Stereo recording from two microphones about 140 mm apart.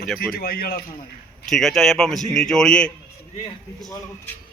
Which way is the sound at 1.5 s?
Centre (ahead or behind).